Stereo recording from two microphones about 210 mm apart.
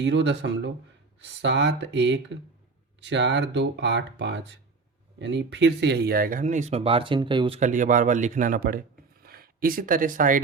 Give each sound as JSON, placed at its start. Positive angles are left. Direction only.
{"t": 0.0, "sound": "speech", "side_deg": -55}